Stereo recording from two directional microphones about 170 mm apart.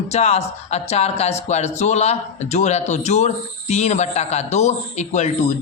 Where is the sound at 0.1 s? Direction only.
40° left (ahead or behind).